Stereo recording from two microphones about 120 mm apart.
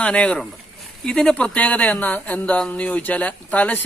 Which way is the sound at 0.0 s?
10° left (ahead or behind).